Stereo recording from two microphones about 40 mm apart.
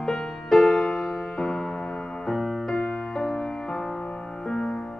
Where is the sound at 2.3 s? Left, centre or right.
Centre.